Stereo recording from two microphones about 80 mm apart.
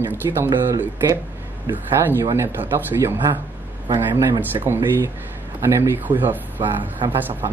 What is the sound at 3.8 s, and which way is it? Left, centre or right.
Speech, right.